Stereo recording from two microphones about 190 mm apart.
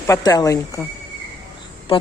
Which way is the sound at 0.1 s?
20° left (ahead or behind).